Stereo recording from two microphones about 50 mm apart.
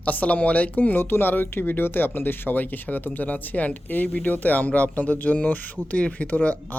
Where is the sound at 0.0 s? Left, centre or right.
Left.